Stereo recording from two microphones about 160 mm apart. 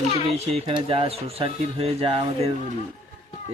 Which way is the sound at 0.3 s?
40° right (ahead or behind).